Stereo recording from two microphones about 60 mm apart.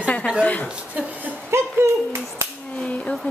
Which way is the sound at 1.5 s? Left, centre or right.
Right.